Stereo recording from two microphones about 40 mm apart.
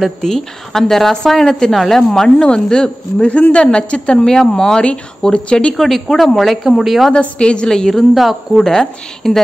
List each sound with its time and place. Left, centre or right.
0.2 s speech: centre
5.3 s speech: left
5.8 s speech: centre
7.1 s speech: left
7.6 s speech: centre
8.1 s speech: centre
8.5 s speech: centre